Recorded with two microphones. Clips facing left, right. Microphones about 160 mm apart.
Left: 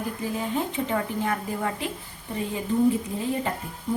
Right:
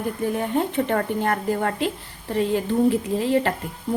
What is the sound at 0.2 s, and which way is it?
A woman's voice, 60° right (ahead or behind).